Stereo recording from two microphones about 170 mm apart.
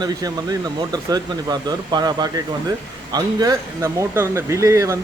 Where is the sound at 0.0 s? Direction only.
25° right (ahead or behind).